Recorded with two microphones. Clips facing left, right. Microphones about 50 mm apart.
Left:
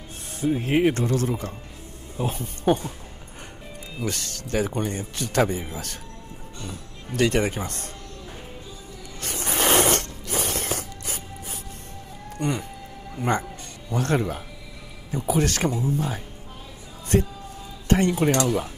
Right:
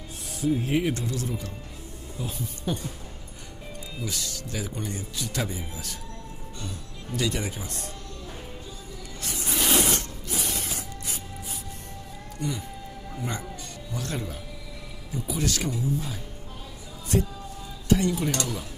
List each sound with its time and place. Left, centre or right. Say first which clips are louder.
0.4 s speech: left 4 dB; left
4.0 s speech: left 5 dB; left
7.2 s speech: left 7 dB; left
9.2 s a sound: left 4 dB; left
12.4 s speech: left 5 dB; left